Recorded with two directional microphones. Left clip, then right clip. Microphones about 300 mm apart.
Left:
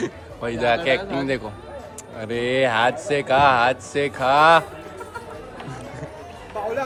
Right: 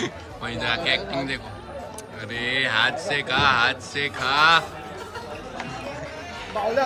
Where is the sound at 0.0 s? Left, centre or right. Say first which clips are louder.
Left 2 dB; centre.